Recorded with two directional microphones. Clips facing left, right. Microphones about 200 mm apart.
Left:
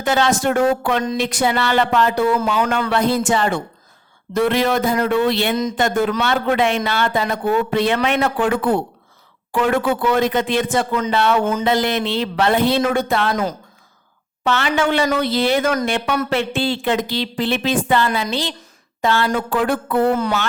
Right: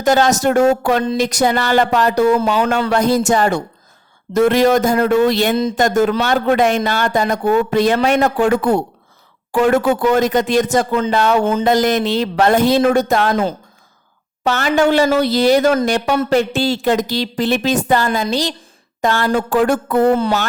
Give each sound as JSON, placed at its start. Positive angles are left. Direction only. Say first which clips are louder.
{"t": 0.0, "sound": "speech", "louder": "right 4 dB", "side_deg": -40}
{"t": 2.4, "sound": "speech", "louder": "right 3 dB", "side_deg": -30}
{"t": 2.9, "sound": "speech", "louder": "right 3 dB", "side_deg": -40}
{"t": 13.3, "sound": "speech", "louder": "right 4 dB", "side_deg": -30}
{"t": 14.4, "sound": "speech", "louder": "right 4 dB", "side_deg": -45}
{"t": 20.1, "sound": "speech", "louder": "right 3 dB", "side_deg": -30}